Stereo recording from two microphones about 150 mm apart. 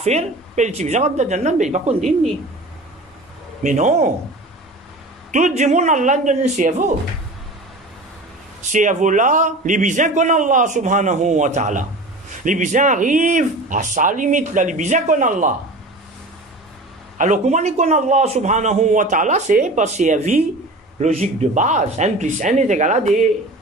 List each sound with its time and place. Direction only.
0.0 s a man's voice: 45° right (ahead or behind)
3.6 s a man's voice: 50° right (ahead or behind)
5.3 s a man's voice: 55° right (ahead or behind)
8.7 s a man's voice: 55° right (ahead or behind)
17.2 s a man's voice: 55° right (ahead or behind)
21.0 s a man's voice: 45° right (ahead or behind)